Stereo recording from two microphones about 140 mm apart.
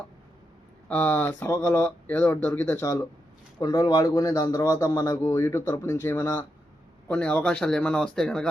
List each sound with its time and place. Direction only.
0.9 s speech: 10° left (ahead or behind)
7.1 s speech: 5° left (ahead or behind)